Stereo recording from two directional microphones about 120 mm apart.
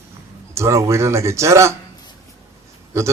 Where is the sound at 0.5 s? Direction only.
25° right (ahead or behind).